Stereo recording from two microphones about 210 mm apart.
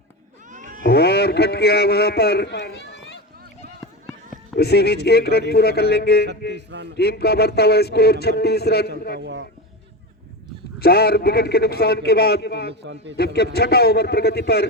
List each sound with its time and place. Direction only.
0.5 s cat: 35° right (ahead or behind)
0.9 s a man's voice: 50° left (ahead or behind)
4.5 s a man's voice: 50° left (ahead or behind)
9.1 s a man's voice: 55° right (ahead or behind)
10.8 s a man's voice: 45° left (ahead or behind)
12.8 s a man's voice: 55° right (ahead or behind)
13.1 s a man's voice: 50° left (ahead or behind)